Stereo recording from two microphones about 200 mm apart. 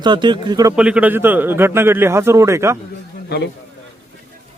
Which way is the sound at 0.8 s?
5° right (ahead or behind).